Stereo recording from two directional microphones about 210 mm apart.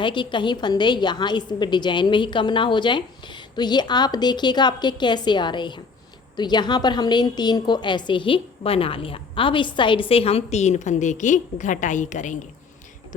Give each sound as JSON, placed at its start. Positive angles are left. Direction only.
{"t": 0.0, "sound": "a woman's voice", "side_deg": 20}